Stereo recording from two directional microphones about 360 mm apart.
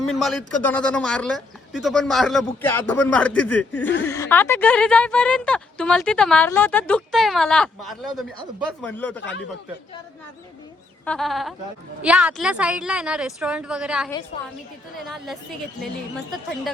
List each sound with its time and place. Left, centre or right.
0.1 s a woman's voice: centre
11.0 s a woman's voice: centre
14.3 s a woman's voice: centre
15.0 s a woman's voice: centre